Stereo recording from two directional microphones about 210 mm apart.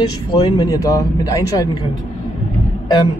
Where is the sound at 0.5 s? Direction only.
20° left (ahead or behind).